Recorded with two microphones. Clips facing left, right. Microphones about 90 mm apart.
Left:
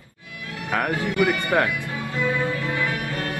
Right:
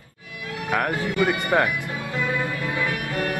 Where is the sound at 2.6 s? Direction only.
20° right (ahead or behind).